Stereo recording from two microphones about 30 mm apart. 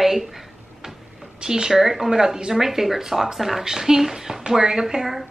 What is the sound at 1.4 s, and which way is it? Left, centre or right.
Speech, right.